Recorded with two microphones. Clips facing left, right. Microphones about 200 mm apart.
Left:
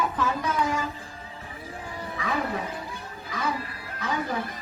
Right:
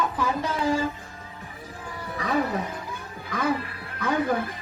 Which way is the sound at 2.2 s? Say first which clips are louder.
Right 2 dB; 40° right (ahead or behind).